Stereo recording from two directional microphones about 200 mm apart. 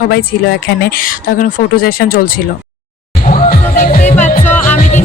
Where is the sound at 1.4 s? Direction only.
45° left (ahead or behind).